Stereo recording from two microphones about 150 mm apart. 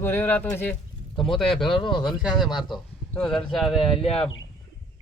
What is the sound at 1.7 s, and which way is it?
Speech, 35° left (ahead or behind).